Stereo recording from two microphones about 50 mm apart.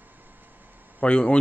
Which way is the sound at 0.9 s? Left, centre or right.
Left.